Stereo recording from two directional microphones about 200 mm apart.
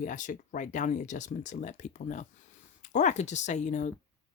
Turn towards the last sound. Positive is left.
turn(degrees=35)  # may be behind; listen again after turning